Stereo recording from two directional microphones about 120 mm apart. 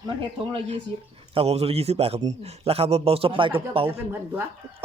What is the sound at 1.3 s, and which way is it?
A man's voice, 55° right (ahead or behind).